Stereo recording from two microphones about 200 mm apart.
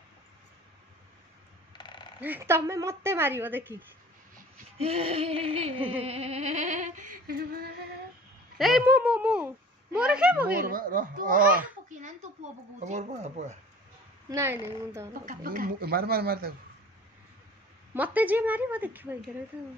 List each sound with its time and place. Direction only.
1.7 s mechanisms: 20° left (ahead or behind)
2.1 s speech: 10° right (ahead or behind)
4.7 s music: 30° right (ahead or behind); by 7.9 s 50° right (ahead or behind)
8.5 s speech: centre (ahead or behind)
10.5 s speech: 45° right (ahead or behind)
11.9 s music: 35° right (ahead or behind)
14.3 s speech: 15° right (ahead or behind)
15.2 s speech: 45° right (ahead or behind)
17.9 s speech: 10° right (ahead or behind)